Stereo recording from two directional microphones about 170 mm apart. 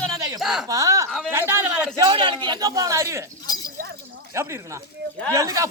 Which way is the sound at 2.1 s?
30° right (ahead or behind).